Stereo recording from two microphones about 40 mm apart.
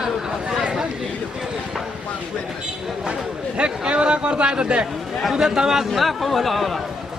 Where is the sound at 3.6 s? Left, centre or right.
Right.